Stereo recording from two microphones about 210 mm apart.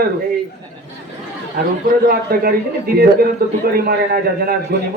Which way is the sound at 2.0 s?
45° right (ahead or behind).